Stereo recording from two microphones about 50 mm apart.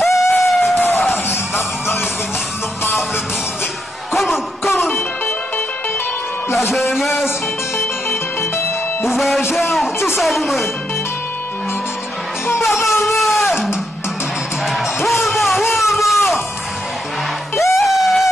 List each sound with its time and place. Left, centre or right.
0.0 s a sound: centre
0.7 s music: left
4.1 s a sound: centre
6.9 s music: centre
7.7 s music: left
9.1 s music: centre
9.4 s music: left
10.1 s music: centre
12.6 s music: centre
13.0 s a sound: centre
14.7 s music: centre
17.6 s music: centre